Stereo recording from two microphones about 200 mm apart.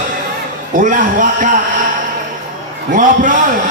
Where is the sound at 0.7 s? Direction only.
40° right (ahead or behind).